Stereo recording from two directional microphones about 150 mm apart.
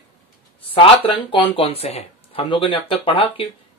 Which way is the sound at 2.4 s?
30° left (ahead or behind).